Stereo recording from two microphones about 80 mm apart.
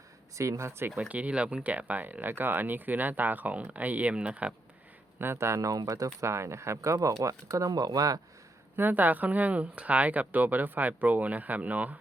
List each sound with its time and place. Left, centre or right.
0.3 s speech: right
0.9 s speech: centre
5.2 s speech: right
5.5 s speech: right
6.1 s speech: right
8.7 s speech: right